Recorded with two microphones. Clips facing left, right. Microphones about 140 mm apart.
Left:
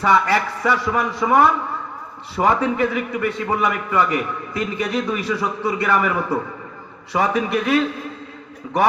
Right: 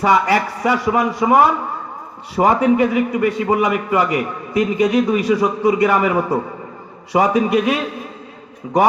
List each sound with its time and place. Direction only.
0.0 s a man's voice: 15° right (ahead or behind)